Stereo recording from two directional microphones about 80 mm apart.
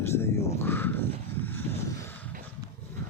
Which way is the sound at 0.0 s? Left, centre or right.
Left.